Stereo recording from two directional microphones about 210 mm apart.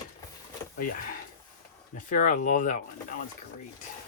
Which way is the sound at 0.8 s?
40° left (ahead or behind).